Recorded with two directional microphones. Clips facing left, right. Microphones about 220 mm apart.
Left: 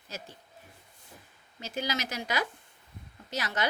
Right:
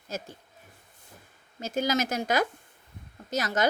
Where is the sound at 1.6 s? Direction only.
45° right (ahead or behind).